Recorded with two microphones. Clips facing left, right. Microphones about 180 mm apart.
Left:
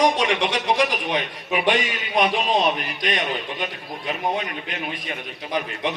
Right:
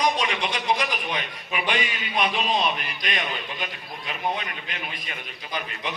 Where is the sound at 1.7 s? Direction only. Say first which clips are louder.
Left 4 dB; 40° left (ahead or behind).